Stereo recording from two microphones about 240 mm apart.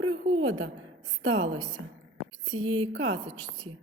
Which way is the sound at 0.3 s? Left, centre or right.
Right.